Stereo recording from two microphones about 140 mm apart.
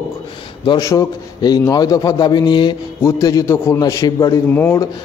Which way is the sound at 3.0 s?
20° left (ahead or behind).